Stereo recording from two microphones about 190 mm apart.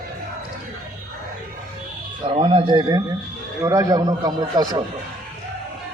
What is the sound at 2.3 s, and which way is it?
A man's voice, 30° right (ahead or behind).